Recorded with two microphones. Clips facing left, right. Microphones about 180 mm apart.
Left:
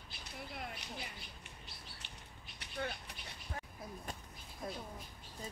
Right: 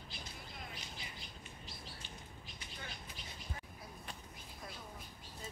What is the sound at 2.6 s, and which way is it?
Vehicle, 70° left (ahead or behind).